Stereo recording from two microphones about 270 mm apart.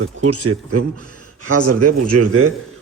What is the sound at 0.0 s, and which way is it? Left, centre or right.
Speech, right.